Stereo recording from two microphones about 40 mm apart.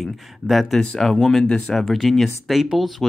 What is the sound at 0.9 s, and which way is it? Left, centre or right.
Speech, centre.